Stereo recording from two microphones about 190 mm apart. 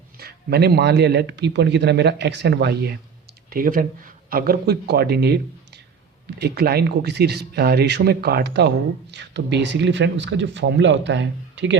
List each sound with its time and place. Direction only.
0.2 s speech: 55° right (ahead or behind)
3.5 s speech: 50° right (ahead or behind); by 11.8 s 70° right (ahead or behind)